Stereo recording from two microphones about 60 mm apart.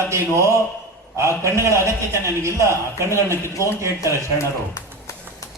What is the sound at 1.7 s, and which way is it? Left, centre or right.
A man's voice, right.